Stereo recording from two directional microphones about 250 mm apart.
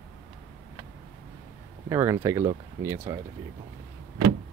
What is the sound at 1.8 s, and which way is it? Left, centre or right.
Speech, centre.